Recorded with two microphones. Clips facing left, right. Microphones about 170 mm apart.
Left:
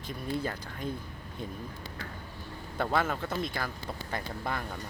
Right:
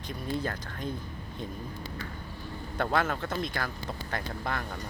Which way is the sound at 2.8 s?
5° left (ahead or behind).